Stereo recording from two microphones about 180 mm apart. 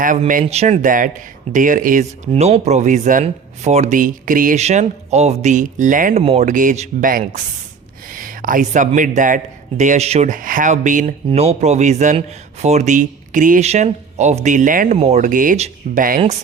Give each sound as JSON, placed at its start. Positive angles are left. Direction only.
{"t": 0.0, "sound": "speech", "side_deg": -50}
{"t": 8.1, "sound": "a sound", "side_deg": -50}
{"t": 9.0, "sound": "speech", "side_deg": -45}
{"t": 14.9, "sound": "speech", "side_deg": -35}